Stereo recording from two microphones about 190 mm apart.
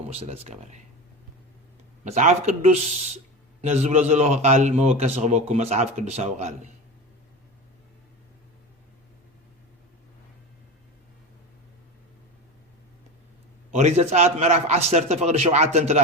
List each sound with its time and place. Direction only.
0.1 s a man's voice: 30° right (ahead or behind)
2.0 s a man's voice: 35° right (ahead or behind)
13.7 s a man's voice: 35° right (ahead or behind)